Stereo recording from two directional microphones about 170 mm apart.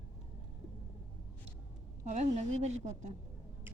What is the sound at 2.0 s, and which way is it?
Speech, 40° right (ahead or behind).